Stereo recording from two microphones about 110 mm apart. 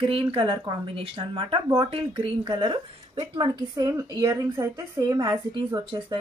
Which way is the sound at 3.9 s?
30° right (ahead or behind).